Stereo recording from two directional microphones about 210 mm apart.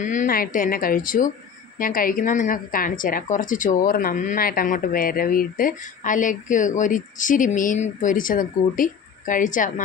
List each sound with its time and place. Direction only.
0.0 s a woman's voice: 35° left (ahead or behind)